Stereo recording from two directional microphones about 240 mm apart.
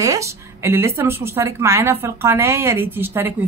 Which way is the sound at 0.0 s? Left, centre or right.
Centre.